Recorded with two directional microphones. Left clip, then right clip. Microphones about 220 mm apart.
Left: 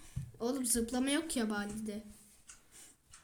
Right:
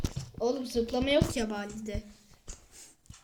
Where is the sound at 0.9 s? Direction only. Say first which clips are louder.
Right 8 dB; 80° left.